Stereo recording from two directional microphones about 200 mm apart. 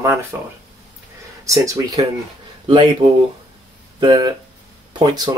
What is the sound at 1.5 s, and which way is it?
Speech, 15° right (ahead or behind).